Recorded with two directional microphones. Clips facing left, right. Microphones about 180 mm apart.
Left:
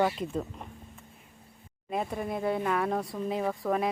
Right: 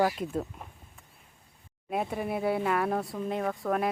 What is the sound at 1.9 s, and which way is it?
Speech, 5° right (ahead or behind).